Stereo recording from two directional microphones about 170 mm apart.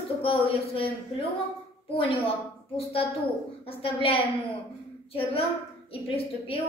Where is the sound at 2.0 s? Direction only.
35° left (ahead or behind).